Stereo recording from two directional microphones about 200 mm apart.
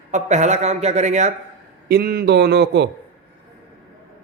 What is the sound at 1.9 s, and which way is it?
Speech, 50° right (ahead or behind).